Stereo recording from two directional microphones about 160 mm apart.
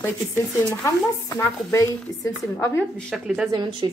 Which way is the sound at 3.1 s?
5° right (ahead or behind).